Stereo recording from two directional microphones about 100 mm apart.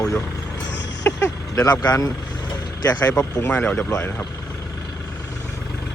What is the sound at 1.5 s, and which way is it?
Speech, 40° left (ahead or behind).